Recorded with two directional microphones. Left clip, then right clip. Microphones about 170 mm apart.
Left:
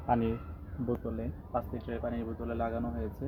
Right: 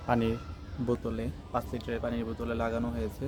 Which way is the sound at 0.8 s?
25° right (ahead or behind).